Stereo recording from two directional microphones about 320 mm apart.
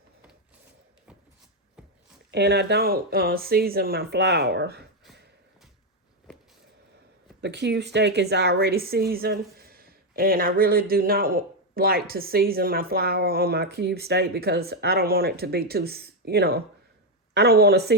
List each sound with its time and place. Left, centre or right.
2.3 s speech: right
7.4 s a woman's voice: right